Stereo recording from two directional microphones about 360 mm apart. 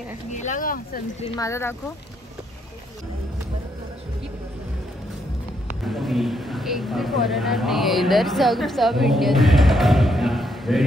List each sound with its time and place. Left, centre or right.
0.3 s speech: centre
1.3 s speech: centre
5.9 s speech: centre